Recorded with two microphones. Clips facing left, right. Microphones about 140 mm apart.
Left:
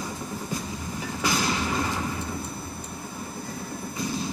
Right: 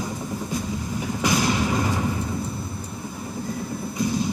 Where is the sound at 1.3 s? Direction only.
15° right (ahead or behind).